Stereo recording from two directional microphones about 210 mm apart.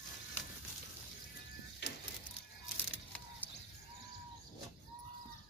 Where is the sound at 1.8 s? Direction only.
55° left (ahead or behind).